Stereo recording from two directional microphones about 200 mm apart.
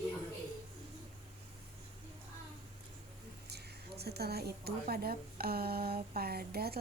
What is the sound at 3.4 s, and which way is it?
A woman's voice, 55° right (ahead or behind).